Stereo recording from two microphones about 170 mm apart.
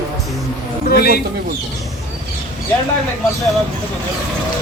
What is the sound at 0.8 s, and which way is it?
Speech, 65° left (ahead or behind).